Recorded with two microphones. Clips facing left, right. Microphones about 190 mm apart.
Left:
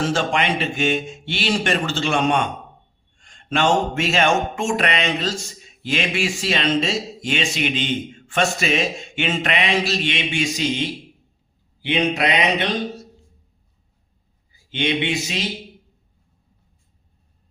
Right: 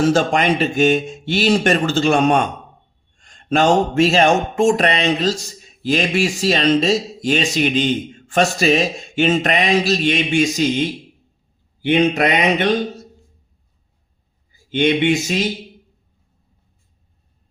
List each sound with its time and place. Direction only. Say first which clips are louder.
0.1 s speech: right 5 dB; 40° right (ahead or behind)
11.8 s mantra: right 5 dB; 50° right (ahead or behind)
14.7 s mantra: right 7 dB; 45° right (ahead or behind)